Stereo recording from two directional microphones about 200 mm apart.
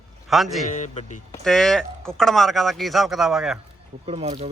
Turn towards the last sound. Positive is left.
turn(degrees=-30)  # may be behind; listen again after turning